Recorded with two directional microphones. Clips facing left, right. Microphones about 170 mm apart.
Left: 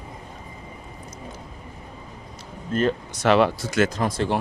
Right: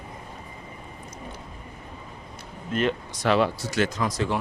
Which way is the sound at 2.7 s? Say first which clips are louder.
Left 3 dB; 35° left (ahead or behind).